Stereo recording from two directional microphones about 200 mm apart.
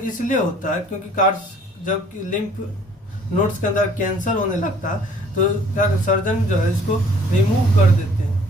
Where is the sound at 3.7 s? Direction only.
40° left (ahead or behind).